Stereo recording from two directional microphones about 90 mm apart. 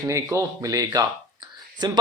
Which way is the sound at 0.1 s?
35° right (ahead or behind).